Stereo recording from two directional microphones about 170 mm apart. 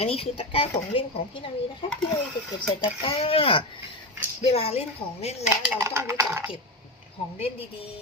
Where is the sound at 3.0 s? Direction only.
30° left (ahead or behind).